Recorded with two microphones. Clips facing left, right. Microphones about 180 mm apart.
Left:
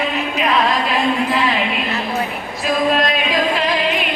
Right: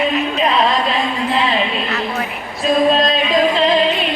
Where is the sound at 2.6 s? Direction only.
25° right (ahead or behind).